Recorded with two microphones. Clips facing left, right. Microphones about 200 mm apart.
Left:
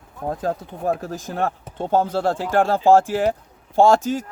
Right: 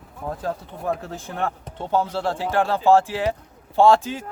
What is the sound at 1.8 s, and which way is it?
Speech, 45° left (ahead or behind).